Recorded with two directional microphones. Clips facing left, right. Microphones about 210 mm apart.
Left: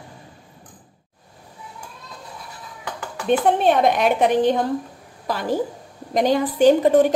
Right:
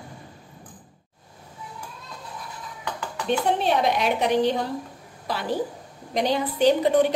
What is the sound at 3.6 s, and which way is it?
A woman's voice, 50° left (ahead or behind).